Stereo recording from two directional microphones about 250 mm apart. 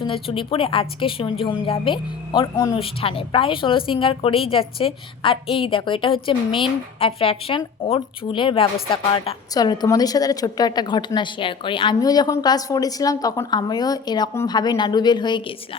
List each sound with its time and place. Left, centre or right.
0.0 s a woman's voice: left